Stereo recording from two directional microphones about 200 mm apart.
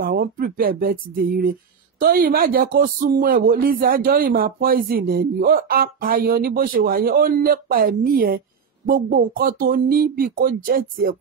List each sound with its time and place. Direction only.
0.0 s speech: 45° right (ahead or behind)